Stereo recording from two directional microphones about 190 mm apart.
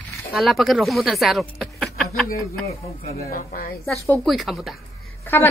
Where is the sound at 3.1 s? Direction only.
50° left (ahead or behind).